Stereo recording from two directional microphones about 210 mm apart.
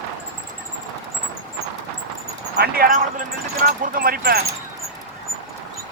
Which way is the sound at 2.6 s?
45° right (ahead or behind).